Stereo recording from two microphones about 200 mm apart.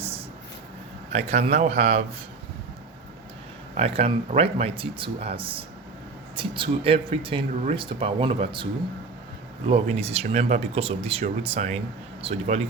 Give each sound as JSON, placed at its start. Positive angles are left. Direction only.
{"t": 1.1, "sound": "a man's voice", "side_deg": -35}
{"t": 3.8, "sound": "speech", "side_deg": -30}
{"t": 9.6, "sound": "a man's voice", "side_deg": -30}